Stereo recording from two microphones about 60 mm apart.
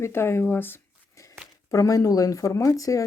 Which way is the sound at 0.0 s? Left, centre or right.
Left.